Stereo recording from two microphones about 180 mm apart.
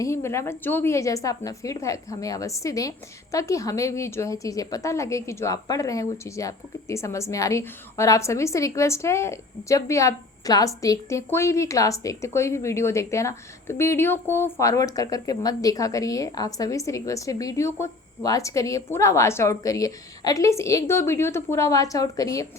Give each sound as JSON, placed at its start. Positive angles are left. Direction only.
{"t": 0.0, "sound": "a woman's voice", "side_deg": 15}